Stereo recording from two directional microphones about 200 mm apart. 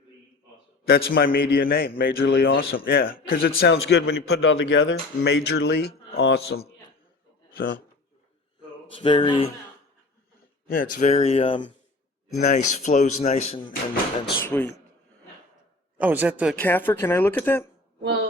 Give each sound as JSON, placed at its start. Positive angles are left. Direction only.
{"t": 0.9, "sound": "a man's voice", "side_deg": 50}
{"t": 2.2, "sound": "a man's voice", "side_deg": 60}
{"t": 9.0, "sound": "speech", "side_deg": 25}
{"t": 10.7, "sound": "speech", "side_deg": 45}
{"t": 14.5, "sound": "speech", "side_deg": 10}
{"t": 16.0, "sound": "a man's voice", "side_deg": -10}
{"t": 16.6, "sound": "speech", "side_deg": 10}